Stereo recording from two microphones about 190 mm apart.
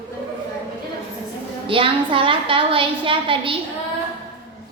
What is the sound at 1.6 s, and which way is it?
A woman's voice, 25° right (ahead or behind).